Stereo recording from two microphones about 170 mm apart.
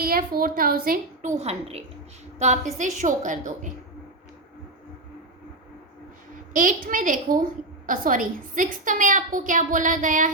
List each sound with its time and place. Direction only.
0.0 s a woman's voice: 60° right (ahead or behind)
1.4 s a woman's voice: 35° right (ahead or behind)
6.5 s a woman's voice: 50° right (ahead or behind)